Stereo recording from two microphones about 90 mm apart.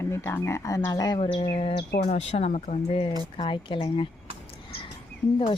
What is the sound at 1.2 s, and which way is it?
Bird, 90° left.